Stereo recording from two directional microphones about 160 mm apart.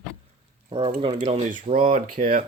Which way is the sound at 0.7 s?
35° right (ahead or behind).